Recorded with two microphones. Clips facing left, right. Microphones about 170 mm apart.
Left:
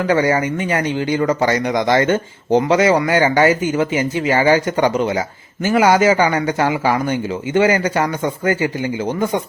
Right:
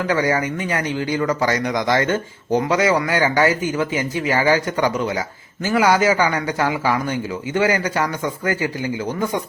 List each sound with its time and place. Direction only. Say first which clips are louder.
0.1 s speech: left 4 dB; 25° left (ahead or behind)